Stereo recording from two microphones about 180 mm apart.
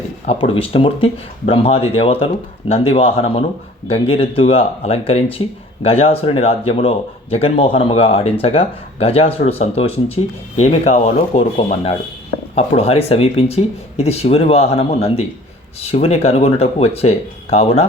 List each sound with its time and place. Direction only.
0.3 s a man's voice: 30° left (ahead or behind)